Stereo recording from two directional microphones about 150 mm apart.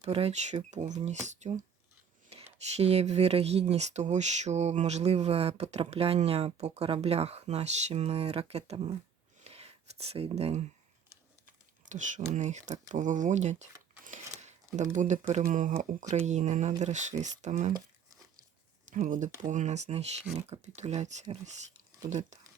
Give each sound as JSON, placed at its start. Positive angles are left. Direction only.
{"t": 0.0, "sound": "speech", "side_deg": -45}
{"t": 9.4, "sound": "a sound", "side_deg": -45}
{"t": 11.9, "sound": "speech", "side_deg": -55}
{"t": 14.4, "sound": "a sound", "side_deg": -55}
{"t": 15.3, "sound": "speech", "side_deg": -55}
{"t": 18.9, "sound": "speech", "side_deg": -55}